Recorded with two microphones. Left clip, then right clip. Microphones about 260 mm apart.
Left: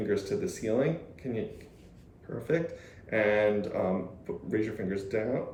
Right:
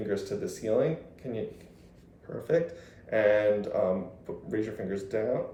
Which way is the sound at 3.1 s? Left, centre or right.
Centre.